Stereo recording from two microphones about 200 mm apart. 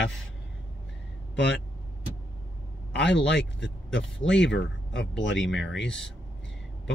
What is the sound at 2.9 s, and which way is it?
Speech, 60° left (ahead or behind).